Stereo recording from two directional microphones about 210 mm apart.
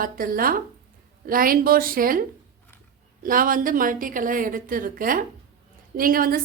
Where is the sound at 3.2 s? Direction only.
40° right (ahead or behind).